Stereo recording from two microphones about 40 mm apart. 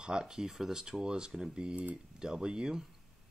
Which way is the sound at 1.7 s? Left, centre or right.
Right.